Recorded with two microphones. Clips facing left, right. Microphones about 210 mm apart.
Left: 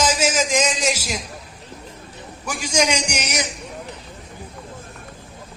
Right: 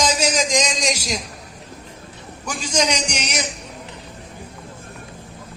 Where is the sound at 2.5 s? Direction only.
10° left (ahead or behind).